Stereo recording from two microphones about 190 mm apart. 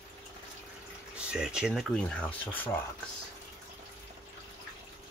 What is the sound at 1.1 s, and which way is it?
Speech, 5° right (ahead or behind).